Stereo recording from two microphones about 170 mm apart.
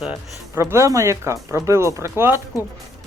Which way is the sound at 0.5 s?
15° right (ahead or behind).